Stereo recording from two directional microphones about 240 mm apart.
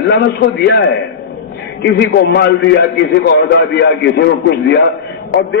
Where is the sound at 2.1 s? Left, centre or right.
Left.